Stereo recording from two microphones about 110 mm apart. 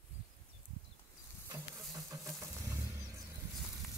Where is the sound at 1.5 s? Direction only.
30° right (ahead or behind).